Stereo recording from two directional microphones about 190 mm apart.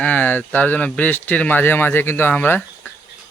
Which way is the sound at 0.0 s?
10° left (ahead or behind).